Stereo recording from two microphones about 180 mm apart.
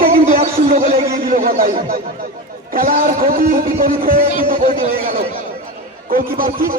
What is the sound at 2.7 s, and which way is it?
A man's voice, 50° right (ahead or behind).